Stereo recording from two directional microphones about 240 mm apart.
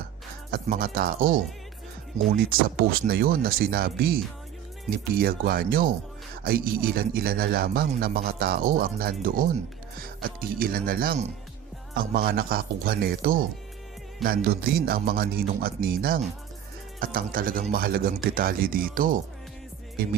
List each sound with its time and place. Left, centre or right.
0.5 s a man's voice: right